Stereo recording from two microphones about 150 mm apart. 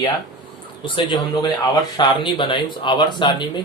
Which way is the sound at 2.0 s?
30° left (ahead or behind).